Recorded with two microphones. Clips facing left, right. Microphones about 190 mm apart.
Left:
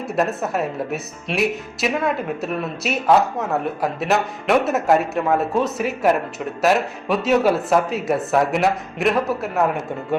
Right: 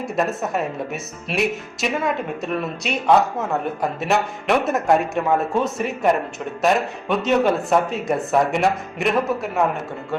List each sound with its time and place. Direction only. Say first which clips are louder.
0.0 s a woman's voice: left 1 dB; centre (ahead or behind)